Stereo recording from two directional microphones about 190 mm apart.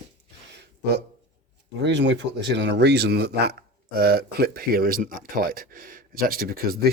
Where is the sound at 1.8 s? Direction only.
70° right (ahead or behind).